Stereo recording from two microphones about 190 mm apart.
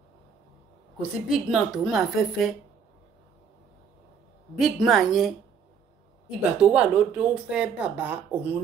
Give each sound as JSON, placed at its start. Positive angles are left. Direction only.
{"t": 1.0, "sound": "speech", "side_deg": 0}
{"t": 4.6, "sound": "speech", "side_deg": 0}
{"t": 6.6, "sound": "speech", "side_deg": -5}